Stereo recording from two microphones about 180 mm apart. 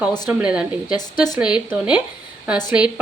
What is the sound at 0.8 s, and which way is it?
Speech, 25° left (ahead or behind).